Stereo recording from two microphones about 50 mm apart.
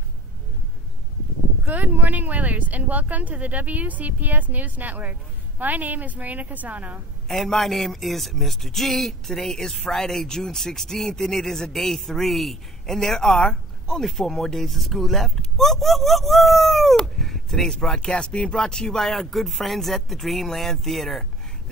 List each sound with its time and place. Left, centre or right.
1.7 s speech: right
7.2 s a man's voice: centre